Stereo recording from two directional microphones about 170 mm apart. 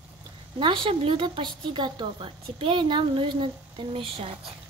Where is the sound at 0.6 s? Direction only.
30° right (ahead or behind).